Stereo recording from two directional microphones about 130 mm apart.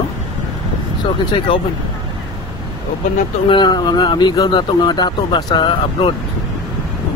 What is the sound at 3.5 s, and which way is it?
Speech, 35° left (ahead or behind).